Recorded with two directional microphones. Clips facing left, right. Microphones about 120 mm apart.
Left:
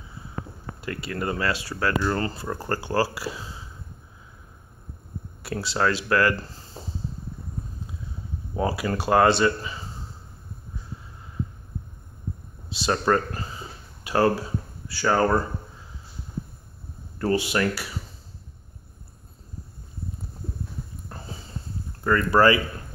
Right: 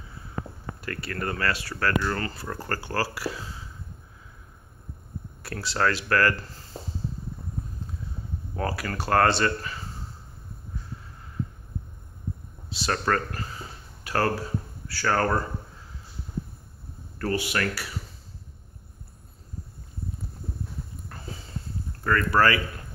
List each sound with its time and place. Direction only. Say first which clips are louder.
0.7 s speech: left 3 dB; 20° left (ahead or behind)
5.4 s speech: left 2 dB; 20° left (ahead or behind)
8.5 s speech: left 5 dB; 15° left (ahead or behind)
12.6 s speech: left 4 dB; 20° left (ahead or behind)
17.2 s speech: left 4 dB; 25° left (ahead or behind)
21.1 s a sound: left 5 dB; 30° left (ahead or behind)
22.0 s speech: left 3 dB; 20° left (ahead or behind)